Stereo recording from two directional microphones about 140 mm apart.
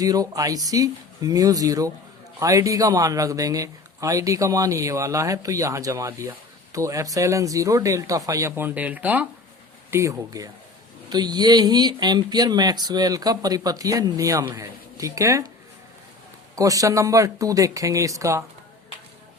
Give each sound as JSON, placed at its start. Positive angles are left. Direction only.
{"t": 0.0, "sound": "speech", "side_deg": -25}
{"t": 16.6, "sound": "speech", "side_deg": -25}